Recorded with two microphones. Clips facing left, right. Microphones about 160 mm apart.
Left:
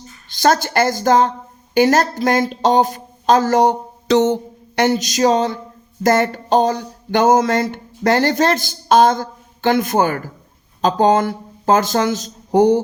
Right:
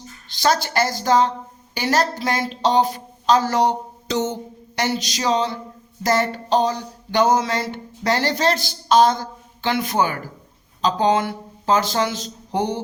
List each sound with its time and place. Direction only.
0.3 s speech: 50° left (ahead or behind)
4.1 s speech: 70° left (ahead or behind); by 12.8 s 45° left (ahead or behind)